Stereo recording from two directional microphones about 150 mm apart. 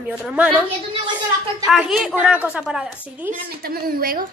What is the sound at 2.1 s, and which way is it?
A woman's voice, 10° right (ahead or behind).